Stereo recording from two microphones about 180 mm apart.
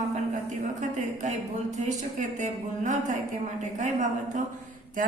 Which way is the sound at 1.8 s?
45° right (ahead or behind).